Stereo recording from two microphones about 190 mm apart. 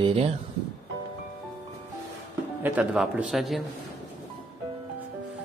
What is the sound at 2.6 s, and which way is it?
A man's voice, 10° right (ahead or behind).